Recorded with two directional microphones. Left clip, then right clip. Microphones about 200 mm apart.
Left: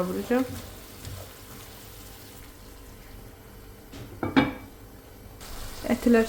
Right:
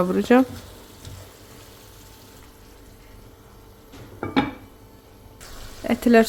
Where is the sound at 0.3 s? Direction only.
50° right (ahead or behind).